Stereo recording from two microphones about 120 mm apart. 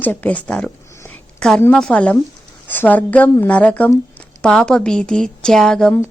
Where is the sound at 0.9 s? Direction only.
20° left (ahead or behind).